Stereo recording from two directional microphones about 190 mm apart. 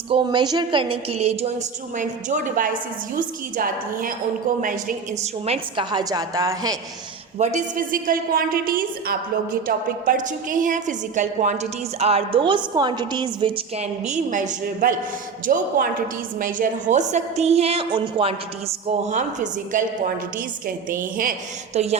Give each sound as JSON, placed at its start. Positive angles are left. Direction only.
{"t": 0.1, "sound": "a woman's voice", "side_deg": -25}
{"t": 7.3, "sound": "a woman's voice", "side_deg": -40}
{"t": 21.2, "sound": "a woman's voice", "side_deg": -40}